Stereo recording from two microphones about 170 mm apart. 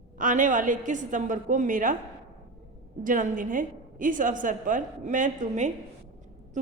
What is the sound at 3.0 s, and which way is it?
A woman's voice, 50° right (ahead or behind).